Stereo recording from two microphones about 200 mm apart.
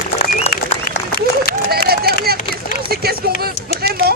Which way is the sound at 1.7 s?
50° right (ahead or behind).